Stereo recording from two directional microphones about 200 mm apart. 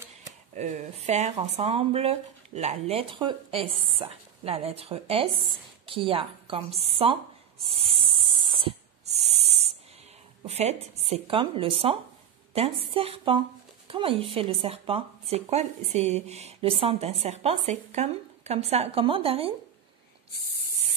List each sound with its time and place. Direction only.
0.6 s a woman's voice: 35° right (ahead or behind)
7.6 s a sound: 30° right (ahead or behind)
11.0 s a woman's voice: 30° right (ahead or behind)